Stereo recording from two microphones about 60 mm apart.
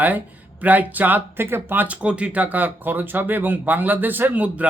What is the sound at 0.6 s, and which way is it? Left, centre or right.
Speech, right.